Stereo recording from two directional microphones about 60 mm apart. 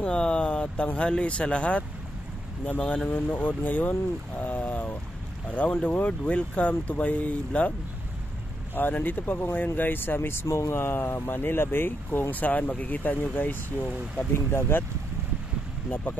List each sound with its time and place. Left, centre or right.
0.0 s speech: centre
3.1 s speech: left
4.4 s a sound: left
5.5 s speech: left
8.7 s speech: left
10.4 s speech: left
10.7 s speech: left
14.3 s speech: left
15.9 s speech: left